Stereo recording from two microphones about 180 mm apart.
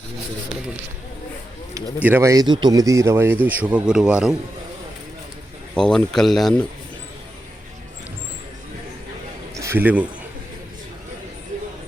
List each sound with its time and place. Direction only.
2.0 s a man's voice: 10° right (ahead or behind)
5.7 s speech: 5° left (ahead or behind)
9.6 s speech: 15° right (ahead or behind)